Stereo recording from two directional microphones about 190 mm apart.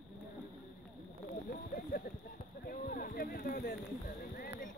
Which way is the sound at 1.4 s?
50° left (ahead or behind).